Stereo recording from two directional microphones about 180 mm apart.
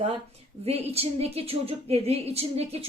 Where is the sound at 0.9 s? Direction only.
35° right (ahead or behind).